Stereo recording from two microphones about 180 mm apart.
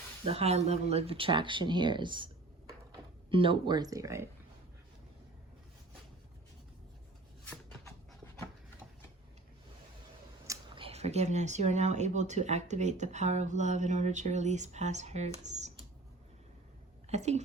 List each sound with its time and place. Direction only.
0.3 s speech: 35° right (ahead or behind); by 4.3 s 15° right (ahead or behind)
10.8 s speech: 35° right (ahead or behind)
17.1 s speech: 40° right (ahead or behind)